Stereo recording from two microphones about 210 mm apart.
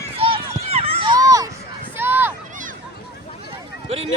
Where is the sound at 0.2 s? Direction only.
25° right (ahead or behind).